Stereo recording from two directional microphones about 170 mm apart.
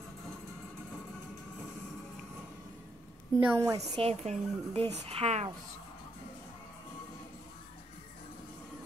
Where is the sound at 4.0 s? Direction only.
40° right (ahead or behind).